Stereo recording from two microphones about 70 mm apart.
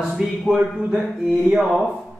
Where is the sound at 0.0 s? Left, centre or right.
Centre.